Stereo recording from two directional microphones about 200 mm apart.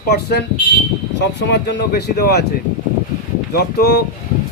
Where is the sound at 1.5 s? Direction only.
55° left (ahead or behind).